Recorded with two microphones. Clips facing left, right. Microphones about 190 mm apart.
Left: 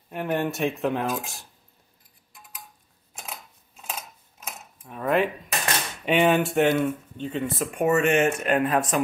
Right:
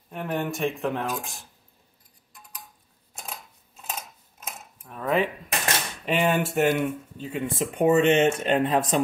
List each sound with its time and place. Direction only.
0.1 s speech: centre (ahead or behind)
4.8 s speech: 5° left (ahead or behind)
7.5 s speech: 30° right (ahead or behind)